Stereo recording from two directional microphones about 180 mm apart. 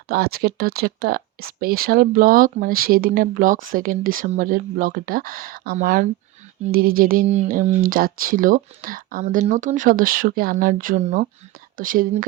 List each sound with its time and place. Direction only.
0.1 s speech: 55° right (ahead or behind)